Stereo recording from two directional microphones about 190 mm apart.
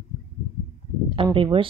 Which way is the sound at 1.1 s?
25° right (ahead or behind).